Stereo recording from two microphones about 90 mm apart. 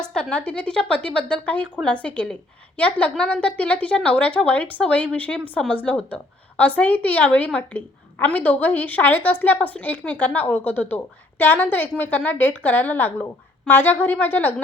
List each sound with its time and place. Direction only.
0.0 s a woman's voice: 10° left (ahead or behind)